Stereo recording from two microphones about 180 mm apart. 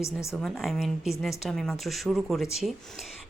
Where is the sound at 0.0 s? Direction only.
15° left (ahead or behind).